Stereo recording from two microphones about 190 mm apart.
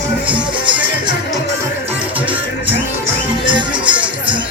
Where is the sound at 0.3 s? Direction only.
5° right (ahead or behind).